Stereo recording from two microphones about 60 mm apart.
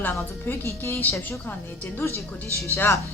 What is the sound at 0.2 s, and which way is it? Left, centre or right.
A woman's voice, left.